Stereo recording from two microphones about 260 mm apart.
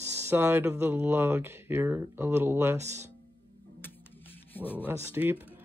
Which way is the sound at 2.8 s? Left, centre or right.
Right.